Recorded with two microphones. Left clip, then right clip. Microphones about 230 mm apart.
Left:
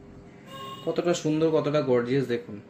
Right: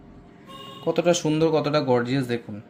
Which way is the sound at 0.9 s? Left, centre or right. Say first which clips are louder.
Right 4 dB; right.